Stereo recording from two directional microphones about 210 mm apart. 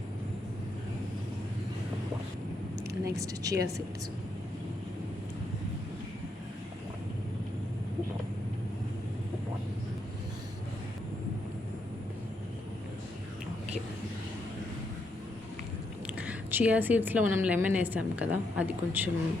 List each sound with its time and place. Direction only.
3.0 s a woman's voice: 15° right (ahead or behind)
16.0 s a woman's voice: 5° right (ahead or behind)